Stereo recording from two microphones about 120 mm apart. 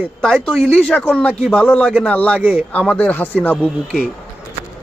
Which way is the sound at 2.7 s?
10° left (ahead or behind).